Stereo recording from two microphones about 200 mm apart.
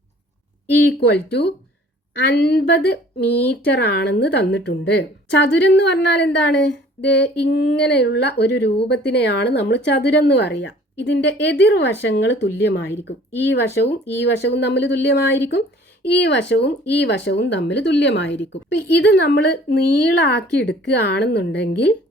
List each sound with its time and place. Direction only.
0.9 s speech: 55° left (ahead or behind)